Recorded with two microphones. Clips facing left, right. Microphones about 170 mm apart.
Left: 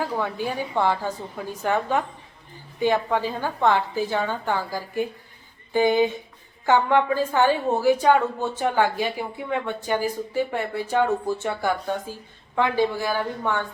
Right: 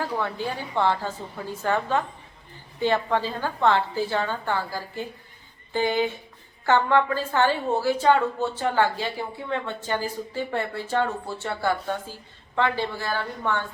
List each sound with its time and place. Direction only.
0.0 s a woman's voice: 10° left (ahead or behind)